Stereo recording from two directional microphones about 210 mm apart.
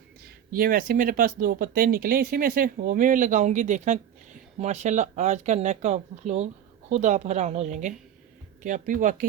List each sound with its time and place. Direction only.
0.5 s speech: 40° right (ahead or behind)